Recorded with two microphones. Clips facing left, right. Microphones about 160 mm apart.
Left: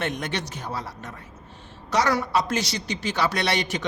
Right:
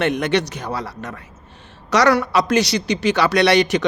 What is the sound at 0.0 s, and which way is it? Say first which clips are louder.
A man's voice: right 10 dB; 75° right (ahead or behind).